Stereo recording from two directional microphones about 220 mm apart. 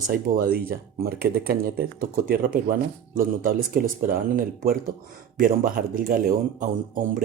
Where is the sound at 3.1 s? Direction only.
40° right (ahead or behind).